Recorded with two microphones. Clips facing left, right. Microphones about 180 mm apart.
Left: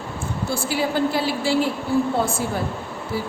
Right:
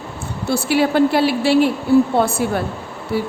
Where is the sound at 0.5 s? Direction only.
70° right (ahead or behind).